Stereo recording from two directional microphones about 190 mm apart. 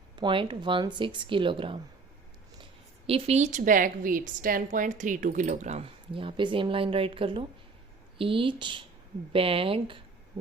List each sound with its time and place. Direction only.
0.2 s speech: 25° right (ahead or behind)
3.1 s a woman's voice: 30° right (ahead or behind)
10.3 s hoot: 30° right (ahead or behind)